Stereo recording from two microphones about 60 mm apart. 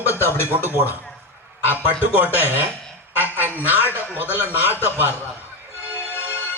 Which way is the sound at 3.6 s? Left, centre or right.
Right.